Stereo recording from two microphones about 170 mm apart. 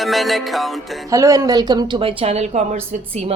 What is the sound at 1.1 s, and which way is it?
A woman's voice, 20° right (ahead or behind).